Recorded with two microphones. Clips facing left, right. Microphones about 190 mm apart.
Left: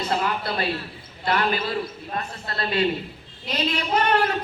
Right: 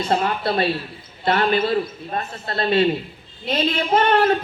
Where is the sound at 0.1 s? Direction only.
25° right (ahead or behind).